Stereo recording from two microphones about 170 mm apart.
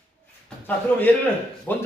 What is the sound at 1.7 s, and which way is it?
Speech, 10° left (ahead or behind).